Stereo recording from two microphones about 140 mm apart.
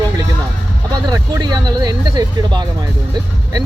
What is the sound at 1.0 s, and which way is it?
Speech, 30° right (ahead or behind).